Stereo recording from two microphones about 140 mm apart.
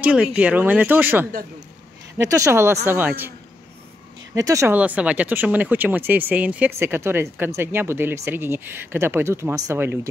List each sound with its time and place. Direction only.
0.0 s speech: 10° right (ahead or behind)
4.4 s speech: 20° right (ahead or behind)
4.7 s speech: 10° right (ahead or behind)